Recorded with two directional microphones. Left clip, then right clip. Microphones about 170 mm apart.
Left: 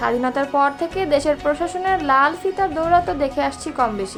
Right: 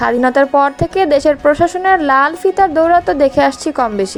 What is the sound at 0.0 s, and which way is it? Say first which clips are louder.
A woman's voice: right 8 dB; 40° right (ahead or behind).